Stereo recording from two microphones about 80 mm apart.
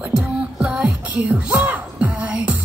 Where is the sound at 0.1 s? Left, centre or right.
Centre.